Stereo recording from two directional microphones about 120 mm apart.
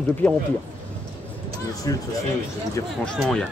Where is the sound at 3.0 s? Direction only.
5° left (ahead or behind).